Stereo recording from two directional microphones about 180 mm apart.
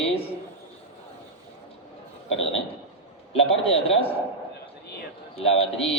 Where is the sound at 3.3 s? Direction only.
35° left (ahead or behind).